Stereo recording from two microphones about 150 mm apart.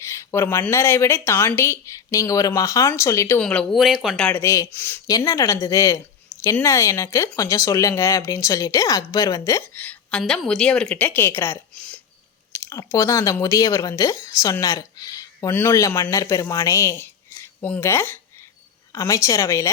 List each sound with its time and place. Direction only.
0.0 s a sound: 20° left (ahead or behind)
0.7 s speech: 15° left (ahead or behind)
3.4 s speech: 5° left (ahead or behind)
4.3 s speech: 15° left (ahead or behind)